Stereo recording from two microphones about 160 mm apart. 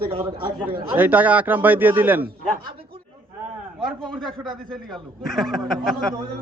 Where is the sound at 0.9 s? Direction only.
10° right (ahead or behind).